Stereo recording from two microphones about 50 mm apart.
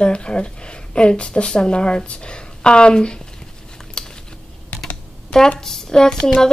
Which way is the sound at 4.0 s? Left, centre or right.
Centre.